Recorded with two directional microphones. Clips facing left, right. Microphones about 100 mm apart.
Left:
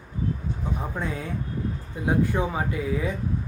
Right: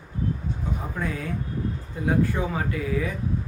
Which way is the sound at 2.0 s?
20° left (ahead or behind).